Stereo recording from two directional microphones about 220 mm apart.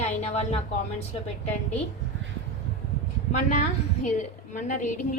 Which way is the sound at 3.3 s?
35° left (ahead or behind).